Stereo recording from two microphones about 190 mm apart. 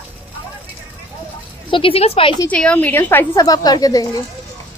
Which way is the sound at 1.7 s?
30° left (ahead or behind).